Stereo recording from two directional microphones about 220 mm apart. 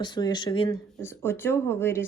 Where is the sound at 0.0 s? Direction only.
20° left (ahead or behind).